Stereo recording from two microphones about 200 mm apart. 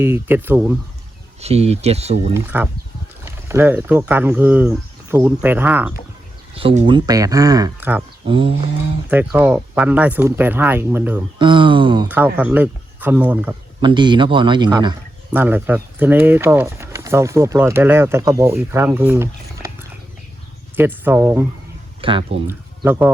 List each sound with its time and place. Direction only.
0.0 s speech: 10° right (ahead or behind)
1.4 s speech: 30° right (ahead or behind)
2.3 s speech: 10° right (ahead or behind)
6.5 s speech: 30° right (ahead or behind); by 8.0 s 10° right (ahead or behind)
8.3 s speech: 25° right (ahead or behind)
9.0 s speech: 10° right (ahead or behind)
11.3 s speech: 25° right (ahead or behind)
12.0 s speech: 10° right (ahead or behind)
13.8 s speech: 20° right (ahead or behind)
15.3 s speech: 10° right (ahead or behind)
20.7 s speech: 10° right (ahead or behind)
22.0 s speech: 30° right (ahead or behind)
22.4 s speech: 10° right (ahead or behind)